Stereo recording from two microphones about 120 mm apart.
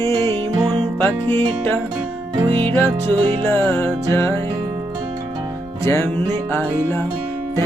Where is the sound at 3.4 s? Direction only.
20° left (ahead or behind).